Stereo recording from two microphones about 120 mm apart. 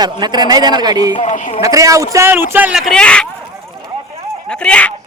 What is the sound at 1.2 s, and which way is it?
Speech, 85° left.